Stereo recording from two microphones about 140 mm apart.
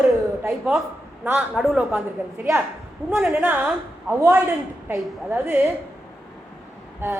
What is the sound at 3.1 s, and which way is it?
A woman's voice, 5° right (ahead or behind).